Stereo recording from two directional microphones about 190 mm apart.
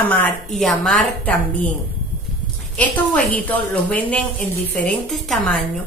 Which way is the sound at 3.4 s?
10° left (ahead or behind).